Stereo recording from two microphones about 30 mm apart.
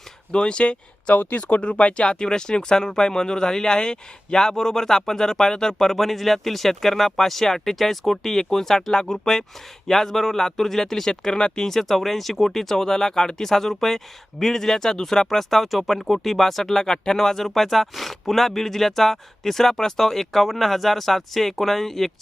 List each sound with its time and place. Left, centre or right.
0.3 s speech: left
1.1 s speech: left
1.8 s speech: left
2.0 s speech: left; by 11.1 s centre
11.1 s speech: left
11.6 s speech: centre
12.6 s speech: centre
16.7 s speech: centre